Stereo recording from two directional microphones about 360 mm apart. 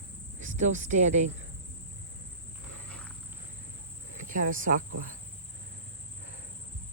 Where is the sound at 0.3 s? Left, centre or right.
Centre.